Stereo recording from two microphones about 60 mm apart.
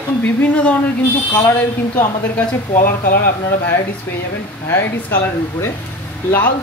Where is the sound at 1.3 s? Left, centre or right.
Left.